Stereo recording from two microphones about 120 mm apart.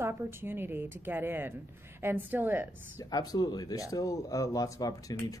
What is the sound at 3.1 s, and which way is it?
Speech, 35° left (ahead or behind).